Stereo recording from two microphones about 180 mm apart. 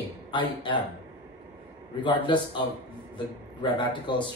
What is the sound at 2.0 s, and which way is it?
Speech, 25° left (ahead or behind).